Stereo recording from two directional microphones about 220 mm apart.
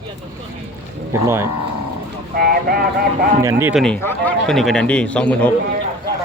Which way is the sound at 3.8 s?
10° left (ahead or behind).